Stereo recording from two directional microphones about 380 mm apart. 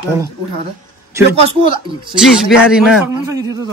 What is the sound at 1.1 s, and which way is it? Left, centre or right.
A man's voice, centre.